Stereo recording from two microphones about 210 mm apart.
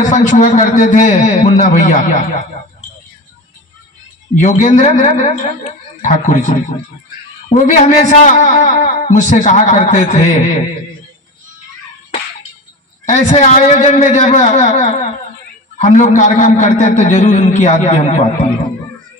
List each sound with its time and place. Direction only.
0.1 s a man's voice: 35° left (ahead or behind)
4.4 s a man's voice: 35° left (ahead or behind)
13.0 s a man's voice: 35° left (ahead or behind)